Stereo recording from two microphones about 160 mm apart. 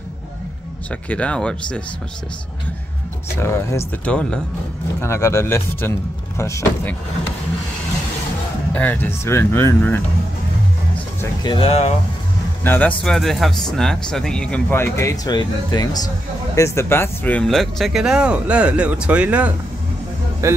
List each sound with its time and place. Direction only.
1.0 s speech: 5° left (ahead or behind)
3.3 s speech: 15° left (ahead or behind)
5.0 s speech: 15° left (ahead or behind)
8.7 s speech: 10° left (ahead or behind)
11.4 s speech: 35° left (ahead or behind)
12.6 s speech: 10° left (ahead or behind); by 20.6 s 20° right (ahead or behind)